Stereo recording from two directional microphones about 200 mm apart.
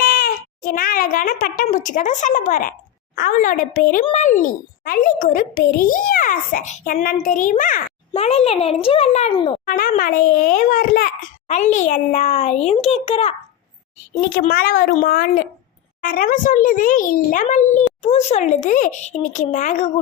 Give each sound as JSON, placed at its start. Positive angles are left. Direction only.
{"t": 0.0, "sound": "a woman's voice", "side_deg": 45}
{"t": 14.3, "sound": "a woman's voice", "side_deg": 45}